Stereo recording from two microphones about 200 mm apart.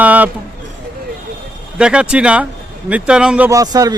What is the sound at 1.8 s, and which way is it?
Speech, 5° right (ahead or behind).